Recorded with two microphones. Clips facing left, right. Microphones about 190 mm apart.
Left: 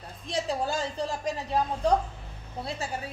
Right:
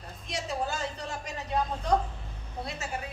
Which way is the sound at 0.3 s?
35° left (ahead or behind).